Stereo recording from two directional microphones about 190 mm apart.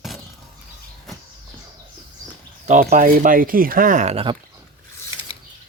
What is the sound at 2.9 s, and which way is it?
Speech, 45° right (ahead or behind).